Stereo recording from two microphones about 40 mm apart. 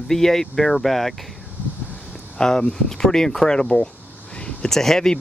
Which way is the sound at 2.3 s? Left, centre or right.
Centre.